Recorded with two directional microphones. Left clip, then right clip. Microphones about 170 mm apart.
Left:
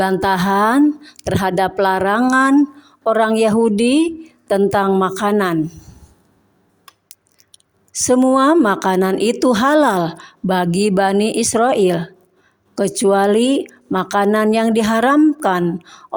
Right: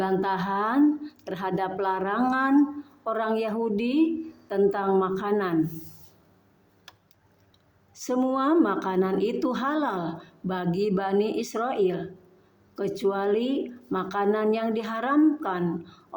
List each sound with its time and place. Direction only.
0.0 s a woman's voice: 40° left (ahead or behind)
7.1 s a woman's voice: 40° left (ahead or behind)